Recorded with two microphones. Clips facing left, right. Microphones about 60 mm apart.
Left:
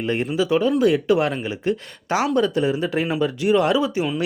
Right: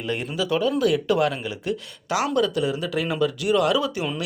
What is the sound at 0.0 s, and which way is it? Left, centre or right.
Speech, left.